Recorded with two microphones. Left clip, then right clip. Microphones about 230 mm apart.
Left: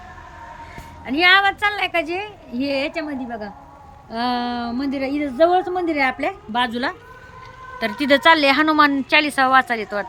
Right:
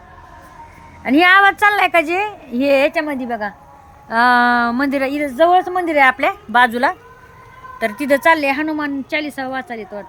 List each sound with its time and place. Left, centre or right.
1.0 s a woman's voice: centre
3.1 s a woman's voice: right
4.1 s a woman's voice: centre